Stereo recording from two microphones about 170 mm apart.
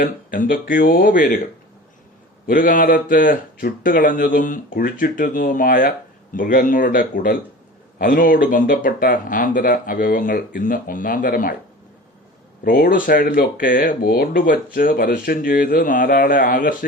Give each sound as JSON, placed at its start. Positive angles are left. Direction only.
{"t": 0.0, "sound": "speech", "side_deg": 55}
{"t": 2.5, "sound": "speech", "side_deg": 55}
{"t": 12.6, "sound": "speech", "side_deg": 60}